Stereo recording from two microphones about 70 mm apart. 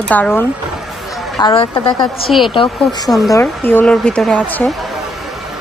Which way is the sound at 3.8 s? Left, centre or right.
Centre.